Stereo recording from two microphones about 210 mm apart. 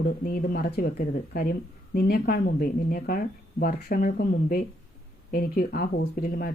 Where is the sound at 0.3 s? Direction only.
45° left (ahead or behind).